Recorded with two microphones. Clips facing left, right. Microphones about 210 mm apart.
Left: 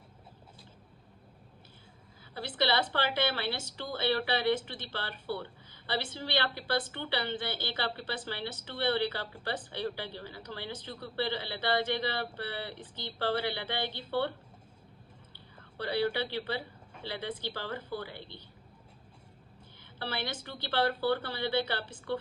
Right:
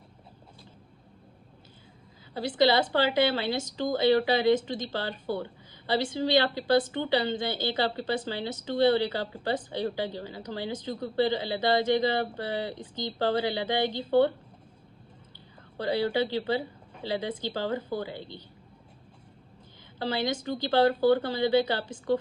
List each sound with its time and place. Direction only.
2.3 s a woman's voice: 15° right (ahead or behind)
15.8 s a woman's voice: 15° right (ahead or behind)
20.1 s a woman's voice: 15° right (ahead or behind)